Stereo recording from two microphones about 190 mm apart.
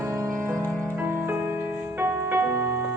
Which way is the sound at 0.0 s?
15° right (ahead or behind).